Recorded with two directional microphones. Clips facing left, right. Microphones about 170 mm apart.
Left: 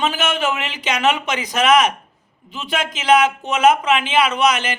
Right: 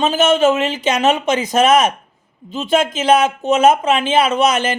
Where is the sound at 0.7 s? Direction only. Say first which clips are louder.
Right 4 dB; 50° right (ahead or behind).